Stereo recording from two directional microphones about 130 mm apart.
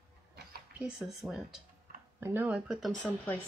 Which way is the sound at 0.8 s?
5° right (ahead or behind).